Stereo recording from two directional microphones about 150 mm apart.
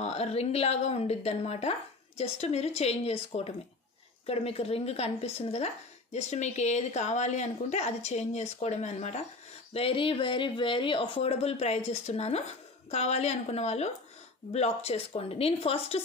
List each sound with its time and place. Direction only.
0.0 s a woman's voice: 45° left (ahead or behind)